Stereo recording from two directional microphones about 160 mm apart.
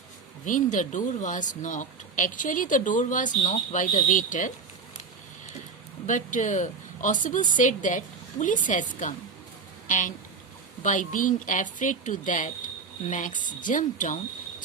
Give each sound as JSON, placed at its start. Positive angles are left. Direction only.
{"t": 0.4, "sound": "a woman's voice", "side_deg": 55}
{"t": 6.1, "sound": "a woman's voice", "side_deg": 50}